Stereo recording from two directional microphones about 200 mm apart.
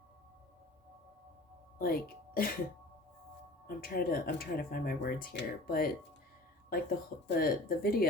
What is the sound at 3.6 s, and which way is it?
Speech, 45° left (ahead or behind).